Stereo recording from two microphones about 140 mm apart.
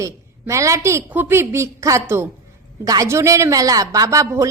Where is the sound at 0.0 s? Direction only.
20° right (ahead or behind).